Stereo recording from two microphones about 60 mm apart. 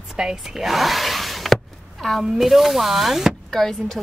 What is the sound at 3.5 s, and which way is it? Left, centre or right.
Speech, centre.